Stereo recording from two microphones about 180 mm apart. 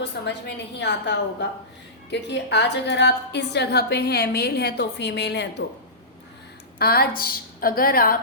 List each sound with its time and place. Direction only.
0.0 s a woman's voice: 70° left (ahead or behind)
6.7 s a woman's voice: 60° left (ahead or behind)